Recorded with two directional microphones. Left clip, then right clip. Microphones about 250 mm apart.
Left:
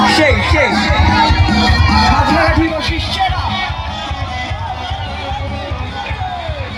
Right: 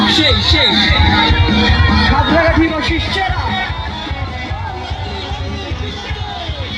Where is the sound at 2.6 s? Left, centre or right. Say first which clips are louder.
Right 1 dB; centre.